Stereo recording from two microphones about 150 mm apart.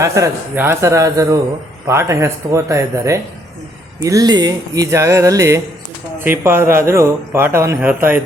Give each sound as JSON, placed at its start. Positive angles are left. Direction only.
{"t": 0.0, "sound": "a man's voice", "side_deg": -20}